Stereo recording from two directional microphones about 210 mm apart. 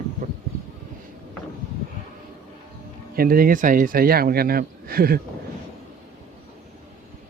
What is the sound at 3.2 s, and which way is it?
A man's voice, 45° right (ahead or behind).